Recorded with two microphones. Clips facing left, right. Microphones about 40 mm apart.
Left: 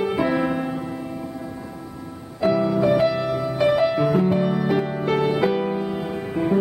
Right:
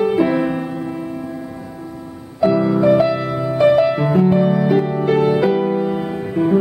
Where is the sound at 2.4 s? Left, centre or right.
Centre.